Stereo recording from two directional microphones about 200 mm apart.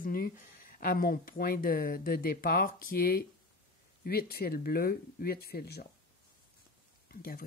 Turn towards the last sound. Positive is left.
turn(degrees=50)  # may be behind; listen again after turning